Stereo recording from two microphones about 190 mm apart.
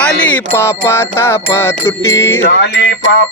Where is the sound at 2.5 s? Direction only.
65° left (ahead or behind).